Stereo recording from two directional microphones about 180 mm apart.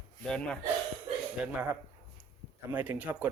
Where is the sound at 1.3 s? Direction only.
10° right (ahead or behind).